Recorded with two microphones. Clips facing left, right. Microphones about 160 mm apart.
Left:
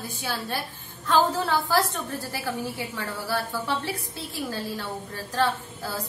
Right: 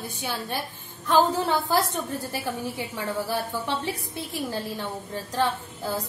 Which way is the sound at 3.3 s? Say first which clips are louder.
Even; 15° right (ahead or behind).